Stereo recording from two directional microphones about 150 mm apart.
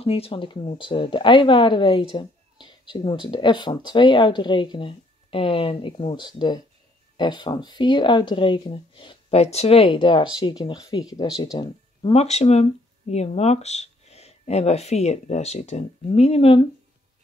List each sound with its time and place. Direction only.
0.0 s speech: 40° left (ahead or behind)